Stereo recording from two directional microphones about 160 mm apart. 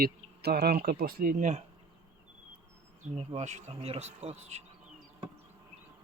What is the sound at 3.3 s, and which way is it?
Bee, 45° right (ahead or behind).